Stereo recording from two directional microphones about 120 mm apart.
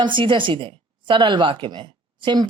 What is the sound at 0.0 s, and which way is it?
Speech, 40° right (ahead or behind).